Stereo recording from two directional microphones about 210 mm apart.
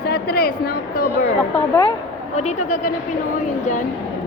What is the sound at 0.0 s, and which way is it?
A woman's voice, 50° left (ahead or behind).